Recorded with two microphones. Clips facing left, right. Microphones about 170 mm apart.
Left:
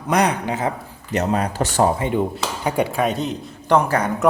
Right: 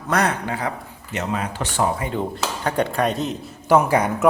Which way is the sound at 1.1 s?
40° left (ahead or behind).